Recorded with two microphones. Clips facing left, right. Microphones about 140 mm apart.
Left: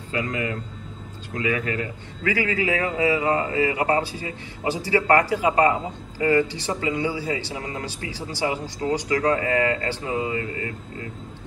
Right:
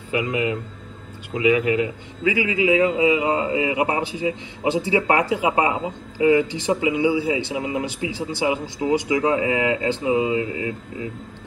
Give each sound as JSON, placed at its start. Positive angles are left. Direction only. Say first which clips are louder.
{"t": 0.1, "sound": "a man's voice", "louder": "right 4 dB", "side_deg": -15}